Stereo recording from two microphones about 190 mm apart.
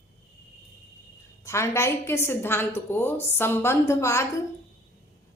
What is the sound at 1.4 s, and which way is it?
A woman's voice, 15° left (ahead or behind).